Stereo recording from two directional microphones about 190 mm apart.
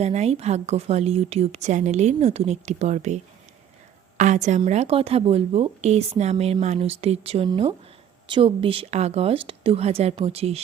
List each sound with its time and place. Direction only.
0.0 s a woman's voice: 35° right (ahead or behind)
4.2 s a woman's voice: 40° right (ahead or behind)